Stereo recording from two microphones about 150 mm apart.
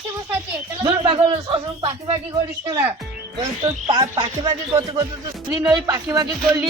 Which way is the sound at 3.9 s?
35° right (ahead or behind).